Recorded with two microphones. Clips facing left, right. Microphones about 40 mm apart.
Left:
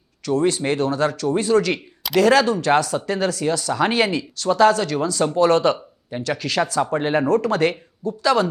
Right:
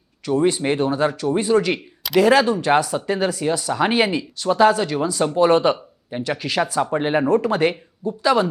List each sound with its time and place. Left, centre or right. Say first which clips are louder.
0.3 s speech: right 1 dB; centre